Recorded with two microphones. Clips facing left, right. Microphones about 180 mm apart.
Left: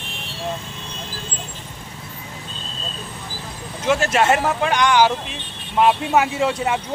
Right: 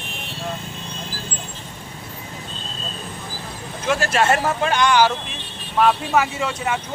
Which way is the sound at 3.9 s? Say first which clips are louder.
Left 2 dB; 20° left (ahead or behind).